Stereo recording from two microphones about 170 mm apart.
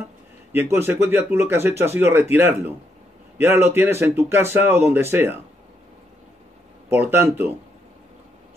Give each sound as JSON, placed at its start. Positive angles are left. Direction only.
{"t": 0.5, "sound": "speech", "side_deg": -15}
{"t": 6.9, "sound": "speech", "side_deg": -15}